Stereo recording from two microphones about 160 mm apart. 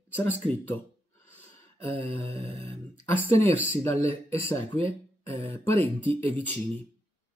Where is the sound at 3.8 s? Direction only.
15° left (ahead or behind).